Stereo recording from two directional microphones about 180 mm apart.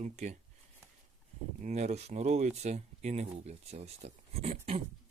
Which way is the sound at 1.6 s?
40° right (ahead or behind).